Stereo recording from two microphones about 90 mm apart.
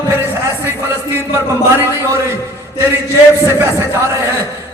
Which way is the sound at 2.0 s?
30° right (ahead or behind).